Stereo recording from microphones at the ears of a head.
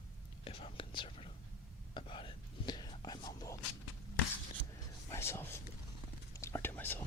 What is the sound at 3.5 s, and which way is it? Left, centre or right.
Walk, left.